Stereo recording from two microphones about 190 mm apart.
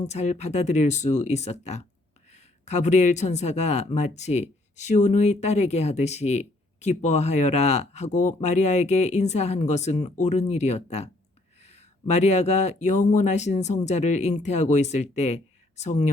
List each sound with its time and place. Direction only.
0.0 s speech: 35° left (ahead or behind)